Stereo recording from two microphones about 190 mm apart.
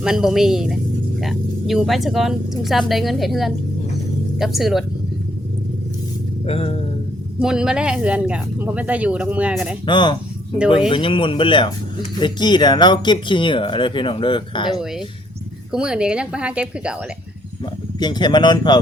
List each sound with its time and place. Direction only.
0.0 s speech: 5° right (ahead or behind)
6.4 s music: 30° left (ahead or behind)
7.3 s speech: 5° right (ahead or behind)
9.8 s speech: 25° left (ahead or behind)
14.7 s speech: centre (ahead or behind)
18.0 s speech: 20° left (ahead or behind)